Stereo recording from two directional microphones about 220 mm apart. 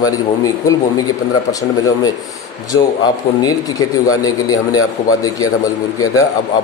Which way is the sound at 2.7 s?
65° left (ahead or behind).